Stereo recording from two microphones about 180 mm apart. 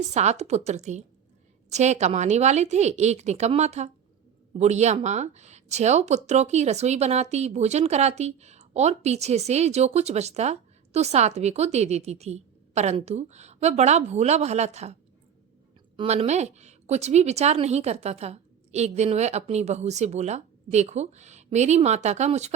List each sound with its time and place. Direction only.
0.1 s speech: 40° right (ahead or behind)
16.0 s speech: 35° right (ahead or behind)